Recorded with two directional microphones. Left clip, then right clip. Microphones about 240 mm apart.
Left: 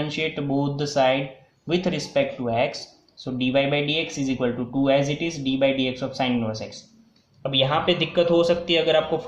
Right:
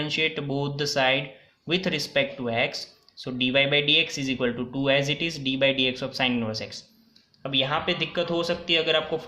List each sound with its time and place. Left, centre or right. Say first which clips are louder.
0.0 s speech: even; right
7.4 s a man's voice: left 4 dB; centre